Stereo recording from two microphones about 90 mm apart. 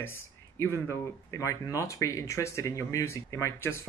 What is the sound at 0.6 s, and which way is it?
Speech, 30° left (ahead or behind).